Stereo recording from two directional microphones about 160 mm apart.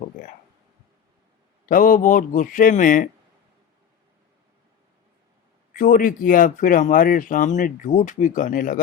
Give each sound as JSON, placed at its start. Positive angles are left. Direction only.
{"t": 1.6, "sound": "speech", "side_deg": 60}
{"t": 5.7, "sound": "speech", "side_deg": 60}